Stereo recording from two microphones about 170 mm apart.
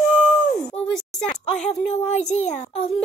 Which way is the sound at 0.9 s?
5° left (ahead or behind).